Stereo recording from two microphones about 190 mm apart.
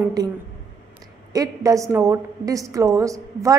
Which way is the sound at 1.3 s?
15° right (ahead or behind).